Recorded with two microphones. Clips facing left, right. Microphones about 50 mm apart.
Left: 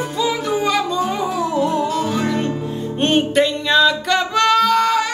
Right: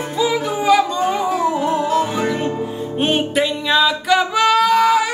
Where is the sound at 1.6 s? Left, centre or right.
Centre.